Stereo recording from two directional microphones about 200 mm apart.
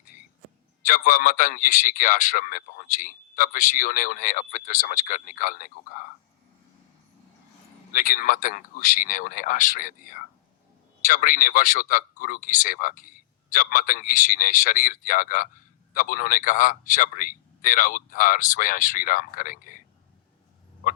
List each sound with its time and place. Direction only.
0.9 s a man's voice: 45° left (ahead or behind)
7.9 s speech: 45° left (ahead or behind)